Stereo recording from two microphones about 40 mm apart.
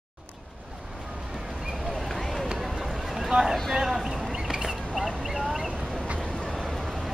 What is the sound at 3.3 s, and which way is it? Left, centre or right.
Speech, centre.